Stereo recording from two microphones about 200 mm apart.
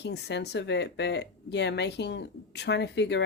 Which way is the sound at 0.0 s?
60° left (ahead or behind).